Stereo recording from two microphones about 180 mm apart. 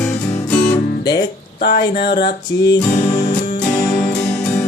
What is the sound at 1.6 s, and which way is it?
Music, 65° left (ahead or behind).